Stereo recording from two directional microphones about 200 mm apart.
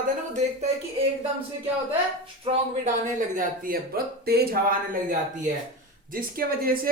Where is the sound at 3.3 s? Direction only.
45° right (ahead or behind).